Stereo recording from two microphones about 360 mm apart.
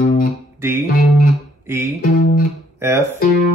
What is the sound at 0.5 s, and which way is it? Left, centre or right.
Music, centre.